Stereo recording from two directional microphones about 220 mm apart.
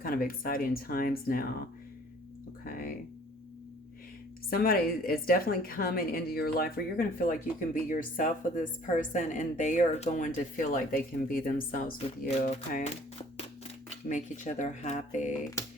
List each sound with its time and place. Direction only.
0.0 s a woman's voice: 40° left (ahead or behind)
2.6 s music: 40° left (ahead or behind)
4.4 s a woman's voice: 40° left (ahead or behind)
13.9 s a woman's voice: 35° left (ahead or behind)